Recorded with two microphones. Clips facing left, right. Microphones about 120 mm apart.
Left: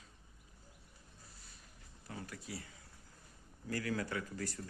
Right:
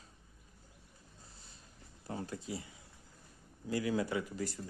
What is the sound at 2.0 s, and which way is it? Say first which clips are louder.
Speech: right 6 dB; 30° right (ahead or behind).